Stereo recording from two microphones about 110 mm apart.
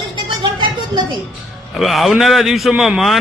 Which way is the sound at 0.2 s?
40° right (ahead or behind).